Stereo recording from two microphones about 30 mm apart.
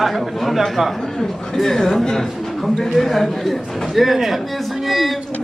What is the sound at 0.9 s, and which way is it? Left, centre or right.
A man's voice, centre.